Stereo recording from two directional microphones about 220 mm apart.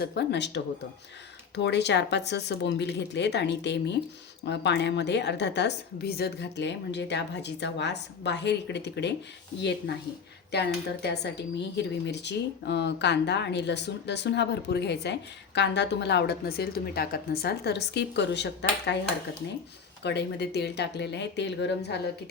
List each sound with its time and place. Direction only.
0.0 s speech: 50° left (ahead or behind)